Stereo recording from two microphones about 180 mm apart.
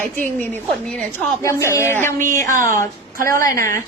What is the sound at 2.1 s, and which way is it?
Speech, 45° right (ahead or behind).